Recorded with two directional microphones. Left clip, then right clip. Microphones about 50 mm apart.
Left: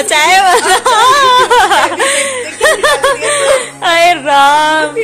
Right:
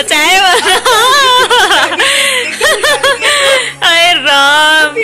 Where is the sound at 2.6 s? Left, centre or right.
Left.